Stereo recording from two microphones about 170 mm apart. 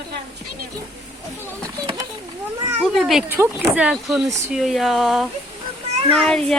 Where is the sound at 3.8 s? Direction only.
5° right (ahead or behind).